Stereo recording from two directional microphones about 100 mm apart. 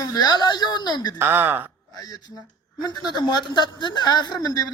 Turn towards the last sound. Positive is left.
turn(degrees=35)  # may be behind; listen again after turning